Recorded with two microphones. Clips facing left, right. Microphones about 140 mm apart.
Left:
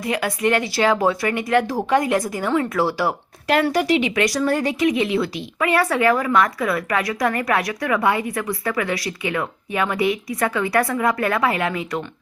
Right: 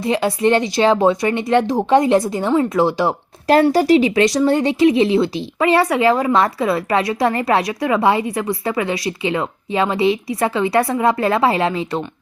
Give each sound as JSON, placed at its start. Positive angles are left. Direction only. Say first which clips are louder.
{"t": 0.0, "sound": "speech", "louder": "right 5 dB", "side_deg": -25}
{"t": 3.4, "sound": "speech", "louder": "right 6 dB", "side_deg": -35}